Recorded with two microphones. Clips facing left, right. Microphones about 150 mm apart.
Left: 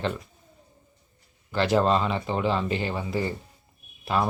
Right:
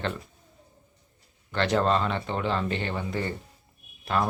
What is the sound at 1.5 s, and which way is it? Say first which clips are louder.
Speech: left 2 dB; 5° left (ahead or behind).